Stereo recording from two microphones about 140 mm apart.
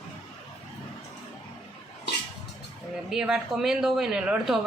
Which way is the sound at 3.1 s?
5° right (ahead or behind).